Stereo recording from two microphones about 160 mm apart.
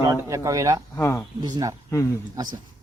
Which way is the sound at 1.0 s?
15° left (ahead or behind).